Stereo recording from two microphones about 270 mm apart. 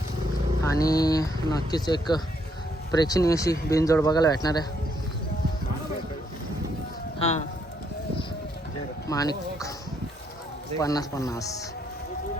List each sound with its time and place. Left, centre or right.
0.6 s speech: centre
7.2 s speech: left
9.0 s speech: centre
10.8 s speech: centre